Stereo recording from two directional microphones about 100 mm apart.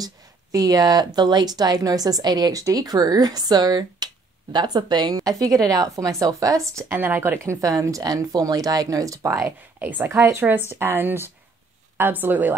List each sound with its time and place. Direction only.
0.0 s speech: 40° right (ahead or behind); by 7.5 s 20° right (ahead or behind)
7.6 s speech: 35° right (ahead or behind)
9.8 s a woman's voice: 20° right (ahead or behind)